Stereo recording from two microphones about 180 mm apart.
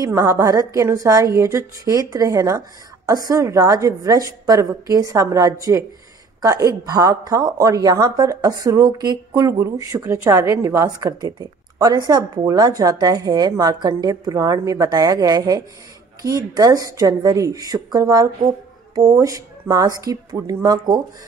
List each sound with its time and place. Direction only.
0.0 s a woman's voice: 15° right (ahead or behind)